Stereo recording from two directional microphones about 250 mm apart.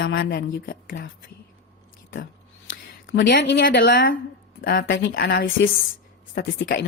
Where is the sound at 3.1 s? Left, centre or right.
Left.